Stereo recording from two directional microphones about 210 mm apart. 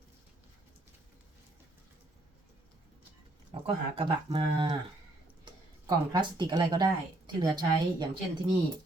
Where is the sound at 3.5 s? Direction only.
25° right (ahead or behind).